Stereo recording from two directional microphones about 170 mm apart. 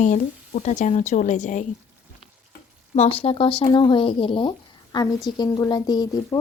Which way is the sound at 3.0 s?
35° left (ahead or behind).